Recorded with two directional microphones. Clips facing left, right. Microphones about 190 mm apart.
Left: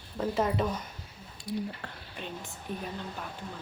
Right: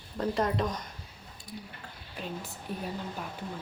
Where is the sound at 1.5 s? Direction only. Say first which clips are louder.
Left 10 dB; 75° left (ahead or behind).